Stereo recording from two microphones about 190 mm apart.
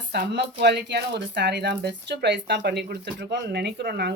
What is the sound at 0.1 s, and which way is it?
Speech, 60° right (ahead or behind).